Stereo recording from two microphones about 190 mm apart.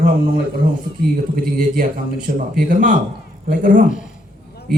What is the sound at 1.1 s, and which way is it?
A man's voice, 50° right (ahead or behind).